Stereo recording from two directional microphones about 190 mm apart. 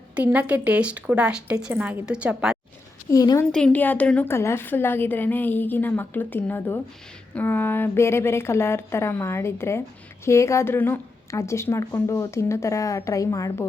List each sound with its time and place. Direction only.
0.2 s speech: 10° right (ahead or behind)
3.1 s a woman's voice: 15° left (ahead or behind)
3.5 s a woman's voice: 5° left (ahead or behind)